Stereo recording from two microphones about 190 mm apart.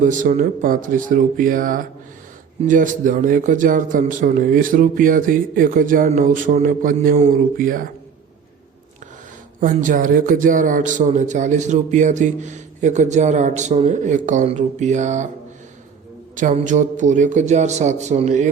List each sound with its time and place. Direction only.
0.0 s a man's voice: 40° right (ahead or behind)
9.6 s speech: 45° right (ahead or behind)
16.3 s speech: 40° right (ahead or behind)